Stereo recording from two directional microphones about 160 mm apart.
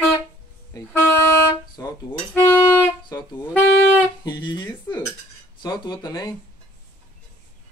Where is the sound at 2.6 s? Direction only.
25° left (ahead or behind).